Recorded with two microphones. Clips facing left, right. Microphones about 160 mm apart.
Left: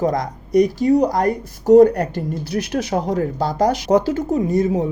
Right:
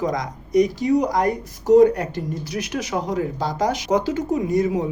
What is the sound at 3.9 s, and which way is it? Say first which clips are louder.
Speech: left 4 dB; 35° left (ahead or behind).